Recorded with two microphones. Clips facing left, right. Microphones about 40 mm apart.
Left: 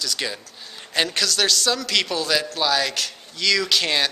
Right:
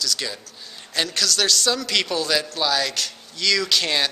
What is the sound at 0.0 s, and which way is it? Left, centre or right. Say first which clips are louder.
A man's voice: even; centre.